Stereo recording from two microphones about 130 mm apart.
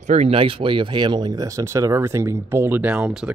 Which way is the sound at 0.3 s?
45° right (ahead or behind).